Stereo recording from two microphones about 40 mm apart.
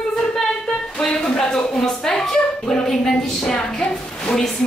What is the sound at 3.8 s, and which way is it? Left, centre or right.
Speech, left.